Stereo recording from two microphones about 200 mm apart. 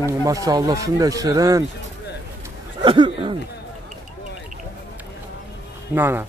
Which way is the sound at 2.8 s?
25° right (ahead or behind).